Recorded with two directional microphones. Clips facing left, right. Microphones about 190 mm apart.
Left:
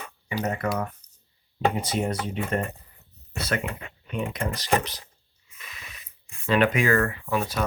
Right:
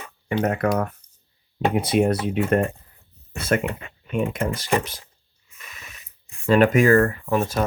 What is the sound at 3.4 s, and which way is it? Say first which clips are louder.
Speech: right 6 dB; 50° right (ahead or behind).